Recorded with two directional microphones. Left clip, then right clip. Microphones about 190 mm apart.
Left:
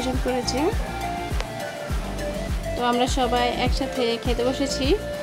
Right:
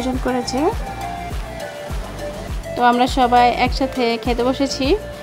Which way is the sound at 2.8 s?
25° right (ahead or behind).